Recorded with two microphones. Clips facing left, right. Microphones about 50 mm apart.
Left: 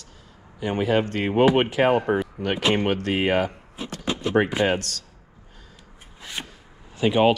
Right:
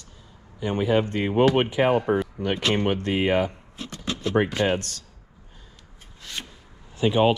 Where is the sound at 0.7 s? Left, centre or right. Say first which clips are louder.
Even; left.